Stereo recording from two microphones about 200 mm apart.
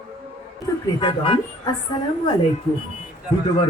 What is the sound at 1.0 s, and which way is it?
Speech, 25° left (ahead or behind).